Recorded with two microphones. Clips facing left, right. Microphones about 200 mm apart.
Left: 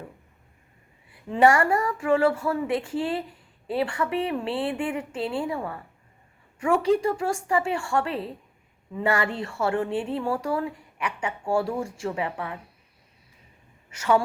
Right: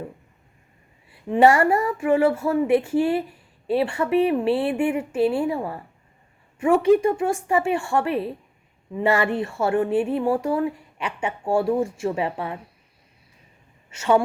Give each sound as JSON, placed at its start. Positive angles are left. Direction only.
{"t": 1.1, "sound": "speech", "side_deg": -25}
{"t": 13.9, "sound": "a woman's voice", "side_deg": -25}